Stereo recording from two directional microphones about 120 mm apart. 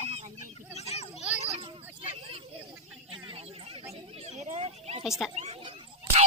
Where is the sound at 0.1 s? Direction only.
60° right (ahead or behind).